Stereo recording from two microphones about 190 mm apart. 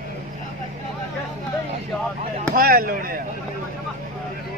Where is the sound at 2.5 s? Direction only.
50° right (ahead or behind).